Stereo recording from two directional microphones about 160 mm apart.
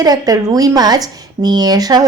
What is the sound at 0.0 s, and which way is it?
A woman's voice, 25° right (ahead or behind).